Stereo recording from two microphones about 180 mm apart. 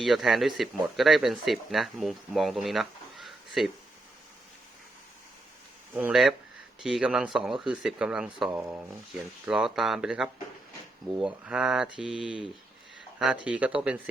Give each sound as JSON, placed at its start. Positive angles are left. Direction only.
{"t": 0.0, "sound": "speech", "side_deg": 0}
{"t": 5.9, "sound": "speech", "side_deg": -10}